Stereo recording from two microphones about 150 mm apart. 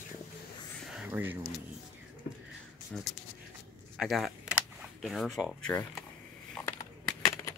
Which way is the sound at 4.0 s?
Centre (ahead or behind).